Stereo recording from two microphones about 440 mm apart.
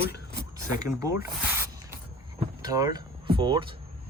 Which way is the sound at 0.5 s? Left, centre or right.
Centre.